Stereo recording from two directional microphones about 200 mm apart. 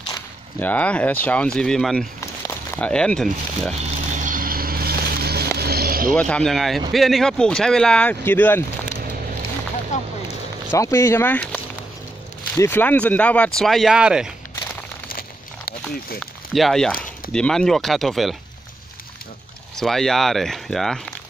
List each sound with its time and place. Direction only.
0.1 s speech: 10° left (ahead or behind)
2.1 s speech: 10° left (ahead or behind)
3.8 s vehicle: 35° right (ahead or behind)
6.1 s speech: 5° left (ahead or behind)
9.9 s speech: 35° left (ahead or behind)
10.2 s a sound: 15° left (ahead or behind)
12.5 s speech: 10° left (ahead or behind); by 14.3 s 5° right (ahead or behind)
15.0 s a sound: 50° left (ahead or behind)
16.2 s speech: centre (ahead or behind)
19.7 s speech: centre (ahead or behind)